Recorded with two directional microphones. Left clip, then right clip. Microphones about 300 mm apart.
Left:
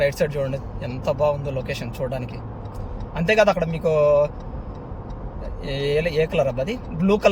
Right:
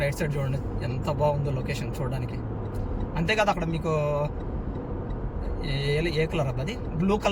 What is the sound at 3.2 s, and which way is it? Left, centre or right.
Speech, centre.